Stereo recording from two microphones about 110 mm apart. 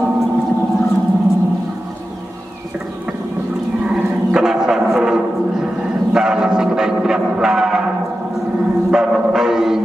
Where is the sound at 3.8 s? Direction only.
5° right (ahead or behind).